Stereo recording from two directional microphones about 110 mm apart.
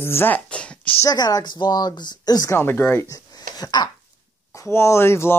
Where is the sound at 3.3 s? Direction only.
35° left (ahead or behind).